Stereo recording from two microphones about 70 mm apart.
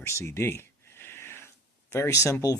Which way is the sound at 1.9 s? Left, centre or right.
Left.